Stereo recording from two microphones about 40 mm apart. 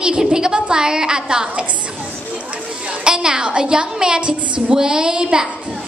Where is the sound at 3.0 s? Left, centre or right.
Right.